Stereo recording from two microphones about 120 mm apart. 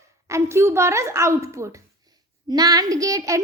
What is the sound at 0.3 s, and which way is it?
A child's voice, 25° right (ahead or behind).